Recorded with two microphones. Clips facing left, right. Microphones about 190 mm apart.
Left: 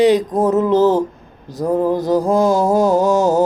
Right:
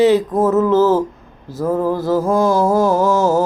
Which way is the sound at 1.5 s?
15° left (ahead or behind).